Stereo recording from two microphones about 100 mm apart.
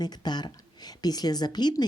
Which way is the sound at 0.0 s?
45° left (ahead or behind).